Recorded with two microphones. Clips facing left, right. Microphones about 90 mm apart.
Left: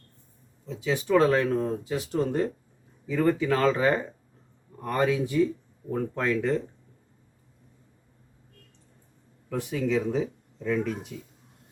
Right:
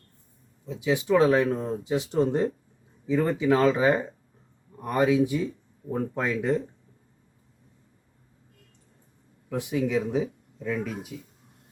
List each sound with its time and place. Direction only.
0.6 s speech: 15° right (ahead or behind)
9.5 s speech: 15° right (ahead or behind)